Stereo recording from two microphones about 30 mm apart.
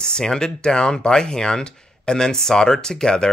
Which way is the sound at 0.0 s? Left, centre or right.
Left.